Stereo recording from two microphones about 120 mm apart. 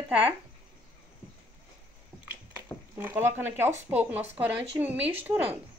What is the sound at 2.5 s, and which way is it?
A woman's voice, 15° right (ahead or behind).